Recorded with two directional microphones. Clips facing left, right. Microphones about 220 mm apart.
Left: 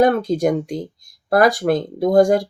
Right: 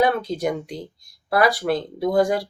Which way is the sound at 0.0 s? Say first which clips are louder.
Left 5 dB; 45° left (ahead or behind).